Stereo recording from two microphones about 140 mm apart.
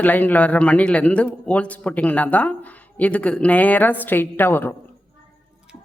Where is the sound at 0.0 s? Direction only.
10° left (ahead or behind).